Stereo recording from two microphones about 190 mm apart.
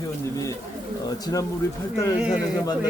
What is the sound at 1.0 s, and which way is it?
Speech, 20° left (ahead or behind).